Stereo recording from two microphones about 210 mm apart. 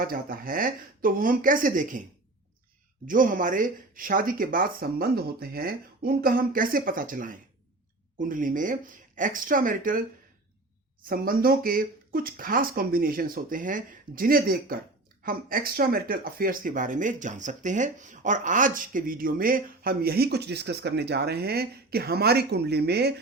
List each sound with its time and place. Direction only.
0.0 s speech: 45° right (ahead or behind)
3.1 s speech: 40° right (ahead or behind)
11.1 s speech: 45° right (ahead or behind)